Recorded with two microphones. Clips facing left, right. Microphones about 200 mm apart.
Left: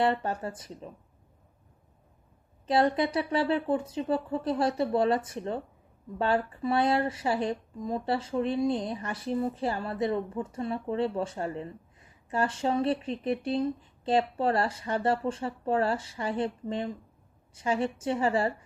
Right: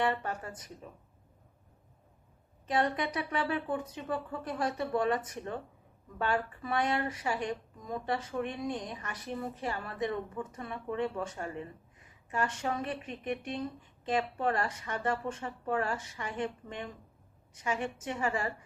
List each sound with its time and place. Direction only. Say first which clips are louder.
0.0 s speech: left 5 dB; 30° left (ahead or behind)
2.6 s speech: left 6 dB; 30° left (ahead or behind)